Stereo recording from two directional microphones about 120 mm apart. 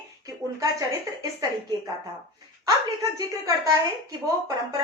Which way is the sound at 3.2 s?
30° right (ahead or behind).